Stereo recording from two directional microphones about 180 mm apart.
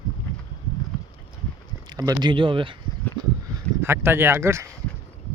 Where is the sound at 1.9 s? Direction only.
20° right (ahead or behind).